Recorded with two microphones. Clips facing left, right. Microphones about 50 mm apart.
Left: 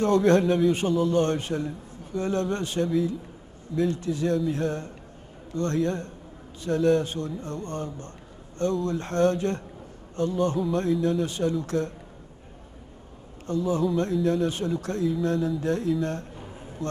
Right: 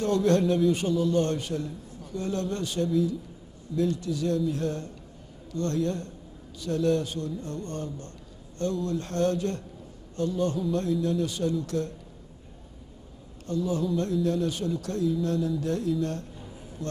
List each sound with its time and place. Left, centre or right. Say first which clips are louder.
0.0 s a man's voice: left 3 dB; left
13.5 s a man's voice: left 3 dB; left
15.2 s mantra: left 2 dB; left
15.6 s speech: left 2 dB; left